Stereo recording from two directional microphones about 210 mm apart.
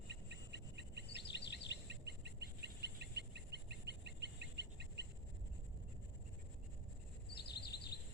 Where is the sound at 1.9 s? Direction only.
55° right (ahead or behind).